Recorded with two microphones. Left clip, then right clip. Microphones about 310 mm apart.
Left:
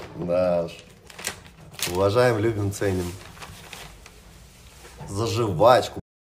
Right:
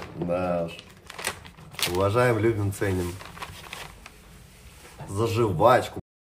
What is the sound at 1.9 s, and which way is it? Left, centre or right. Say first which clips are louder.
A man's voice: left 3 dB; centre.